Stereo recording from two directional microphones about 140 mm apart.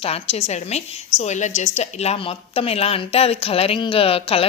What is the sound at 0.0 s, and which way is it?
A woman's voice, 45° left (ahead or behind).